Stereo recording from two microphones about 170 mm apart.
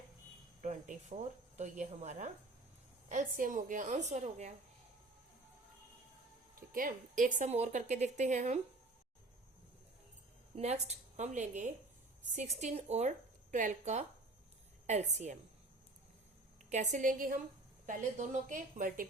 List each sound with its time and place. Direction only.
0.6 s a woman's voice: 45° right (ahead or behind)
6.7 s a woman's voice: 55° right (ahead or behind)
10.5 s a woman's voice: 40° right (ahead or behind)
16.6 s a woman's voice: 45° right (ahead or behind)